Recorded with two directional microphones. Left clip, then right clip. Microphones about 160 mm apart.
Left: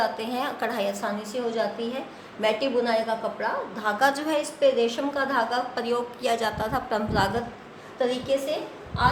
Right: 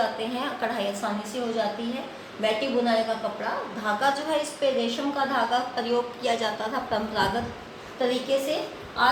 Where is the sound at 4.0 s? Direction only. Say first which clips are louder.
Left 2 dB; 75° left (ahead or behind).